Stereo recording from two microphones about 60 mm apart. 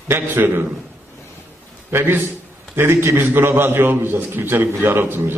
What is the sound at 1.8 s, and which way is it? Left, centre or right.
A man's voice, right.